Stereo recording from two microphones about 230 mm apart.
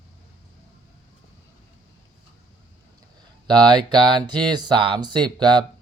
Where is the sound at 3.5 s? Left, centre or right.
Centre.